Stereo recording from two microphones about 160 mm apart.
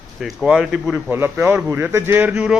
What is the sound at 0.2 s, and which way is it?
Speech, centre (ahead or behind).